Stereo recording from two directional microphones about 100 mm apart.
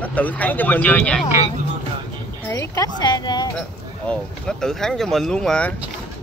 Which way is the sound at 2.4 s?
30° left (ahead or behind).